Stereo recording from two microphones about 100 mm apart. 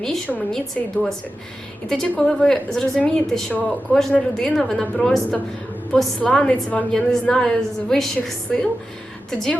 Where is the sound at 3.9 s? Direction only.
5° left (ahead or behind).